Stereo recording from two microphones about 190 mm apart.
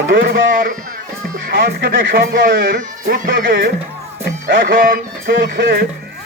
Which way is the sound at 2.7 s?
45° right (ahead or behind).